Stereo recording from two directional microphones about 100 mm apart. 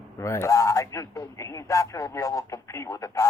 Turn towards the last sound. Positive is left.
turn(degrees=35)  # may be behind; listen again after turning